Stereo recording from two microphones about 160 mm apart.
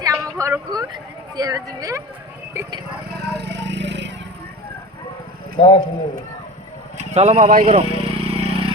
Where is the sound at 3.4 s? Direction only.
90° right.